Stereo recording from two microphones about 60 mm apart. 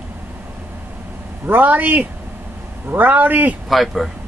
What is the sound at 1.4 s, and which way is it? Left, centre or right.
Speech, right.